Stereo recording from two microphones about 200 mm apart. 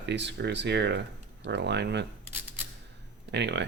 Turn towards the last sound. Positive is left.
turn(degrees=-60)  # may be behind; listen again after turning